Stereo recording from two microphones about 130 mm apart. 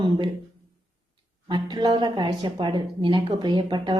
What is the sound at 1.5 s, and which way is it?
Speech, 35° right (ahead or behind).